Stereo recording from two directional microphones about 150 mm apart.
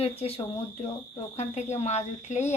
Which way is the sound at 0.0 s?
40° left (ahead or behind).